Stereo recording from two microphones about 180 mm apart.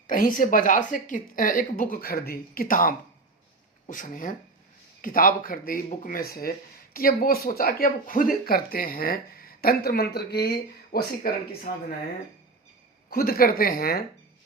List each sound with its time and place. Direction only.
0.1 s speech: 50° left (ahead or behind)
13.1 s speech: 55° left (ahead or behind)